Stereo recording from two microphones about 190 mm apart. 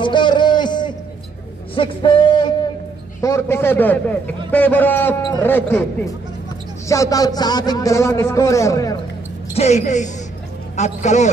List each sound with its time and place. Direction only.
0.0 s a sound: 25° left (ahead or behind)
1.8 s a man's voice: 25° left (ahead or behind); by 5.9 s 10° left (ahead or behind)
6.9 s a man's voice: 15° left (ahead or behind)
9.6 s speech: 35° left (ahead or behind)